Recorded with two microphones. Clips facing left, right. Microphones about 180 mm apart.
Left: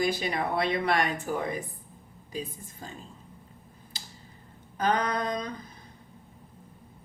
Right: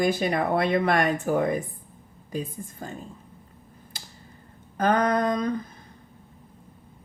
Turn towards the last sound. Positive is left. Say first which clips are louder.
# right 7 dB
turn(degrees=-50)  # may be behind; listen again after turning